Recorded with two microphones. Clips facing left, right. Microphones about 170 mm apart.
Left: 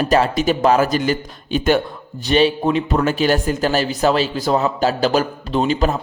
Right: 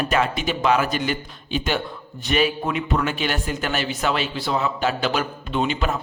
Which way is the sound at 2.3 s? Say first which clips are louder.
Left 6 dB; 30° left (ahead or behind).